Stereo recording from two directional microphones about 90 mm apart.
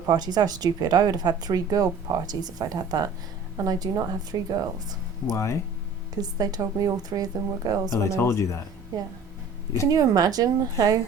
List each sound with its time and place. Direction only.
0.1 s speech: 50° right (ahead or behind)
5.3 s speech: 35° left (ahead or behind)
6.1 s speech: 45° right (ahead or behind)
8.1 s speech: 30° left (ahead or behind)
9.9 s speech: 45° right (ahead or behind)